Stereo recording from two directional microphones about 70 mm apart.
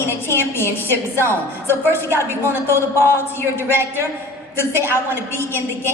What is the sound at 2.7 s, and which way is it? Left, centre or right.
A woman's voice, left.